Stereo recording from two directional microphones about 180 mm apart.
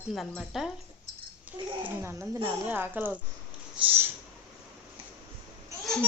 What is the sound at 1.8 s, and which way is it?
Speech, 15° right (ahead or behind).